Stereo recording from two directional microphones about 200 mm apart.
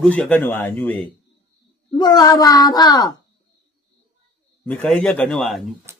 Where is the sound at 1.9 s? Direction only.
20° left (ahead or behind).